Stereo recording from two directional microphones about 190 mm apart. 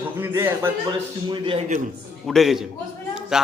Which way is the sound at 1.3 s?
25° right (ahead or behind).